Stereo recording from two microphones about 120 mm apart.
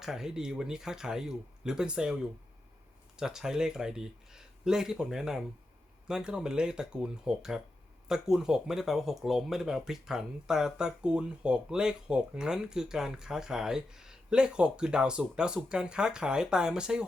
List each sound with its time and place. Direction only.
0.0 s speech: 5° right (ahead or behind)